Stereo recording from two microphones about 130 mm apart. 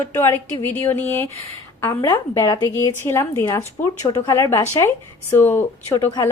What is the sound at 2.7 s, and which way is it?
Speech, 20° left (ahead or behind).